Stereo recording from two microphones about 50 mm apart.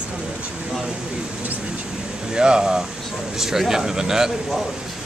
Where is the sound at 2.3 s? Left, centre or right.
Centre.